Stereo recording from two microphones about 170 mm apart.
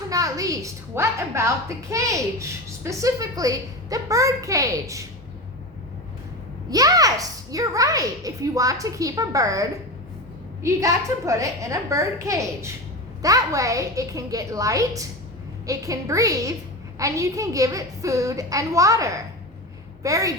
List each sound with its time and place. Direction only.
0.1 s a woman's voice: 20° right (ahead or behind)
6.7 s a woman's voice: 20° right (ahead or behind)